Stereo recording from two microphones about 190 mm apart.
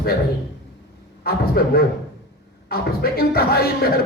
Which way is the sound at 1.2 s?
55° left (ahead or behind).